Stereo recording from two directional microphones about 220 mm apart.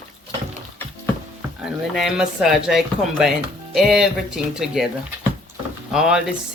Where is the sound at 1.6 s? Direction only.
Centre (ahead or behind).